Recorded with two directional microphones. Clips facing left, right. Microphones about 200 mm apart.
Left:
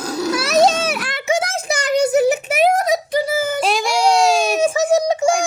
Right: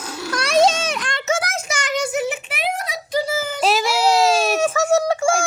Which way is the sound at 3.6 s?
Centre (ahead or behind).